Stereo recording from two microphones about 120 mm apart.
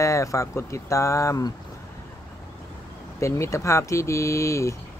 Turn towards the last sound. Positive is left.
turn(degrees=25)  # may be behind; listen again after turning